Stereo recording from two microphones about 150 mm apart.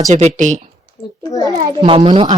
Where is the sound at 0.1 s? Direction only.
50° right (ahead or behind).